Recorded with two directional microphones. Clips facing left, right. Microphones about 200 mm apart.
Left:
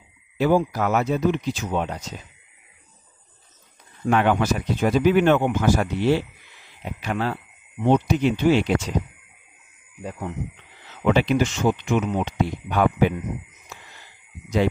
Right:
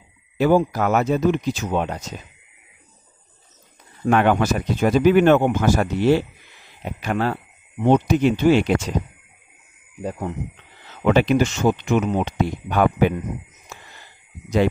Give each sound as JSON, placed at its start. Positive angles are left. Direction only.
{"t": 0.4, "sound": "speech", "side_deg": -50}
{"t": 4.0, "sound": "speech", "side_deg": -50}
{"t": 10.0, "sound": "speech", "side_deg": -40}